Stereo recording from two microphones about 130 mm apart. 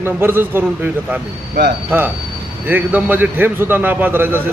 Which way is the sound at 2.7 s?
15° right (ahead or behind).